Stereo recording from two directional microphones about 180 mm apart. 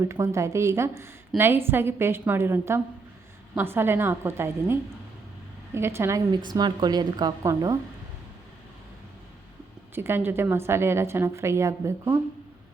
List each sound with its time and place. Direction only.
0.0 s a woman's voice: 15° right (ahead or behind)
9.9 s a woman's voice: 10° right (ahead or behind)